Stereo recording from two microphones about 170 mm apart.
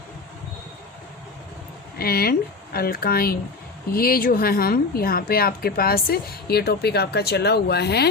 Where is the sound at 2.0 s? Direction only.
60° left (ahead or behind).